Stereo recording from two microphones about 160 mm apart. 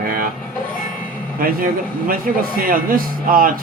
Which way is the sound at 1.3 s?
60° right (ahead or behind).